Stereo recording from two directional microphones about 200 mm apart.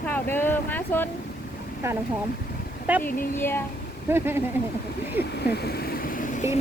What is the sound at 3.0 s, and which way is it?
Speech, 10° left (ahead or behind).